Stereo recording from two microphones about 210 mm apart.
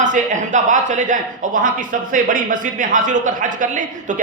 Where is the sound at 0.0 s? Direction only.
35° right (ahead or behind).